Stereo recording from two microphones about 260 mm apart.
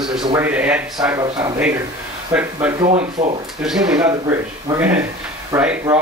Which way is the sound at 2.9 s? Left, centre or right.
Right.